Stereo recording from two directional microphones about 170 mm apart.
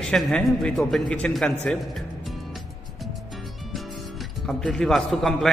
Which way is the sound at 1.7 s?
Centre (ahead or behind).